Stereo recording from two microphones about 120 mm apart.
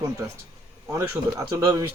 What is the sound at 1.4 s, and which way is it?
Speech, 25° right (ahead or behind).